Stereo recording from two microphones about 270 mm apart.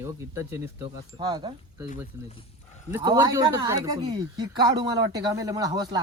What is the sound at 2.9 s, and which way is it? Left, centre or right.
A woman's voice, centre.